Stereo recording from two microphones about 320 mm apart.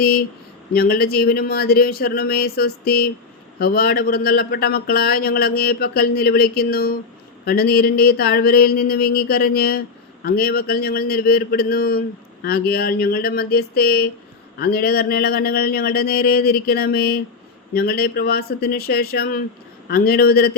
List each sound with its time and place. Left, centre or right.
0.0 s speech: left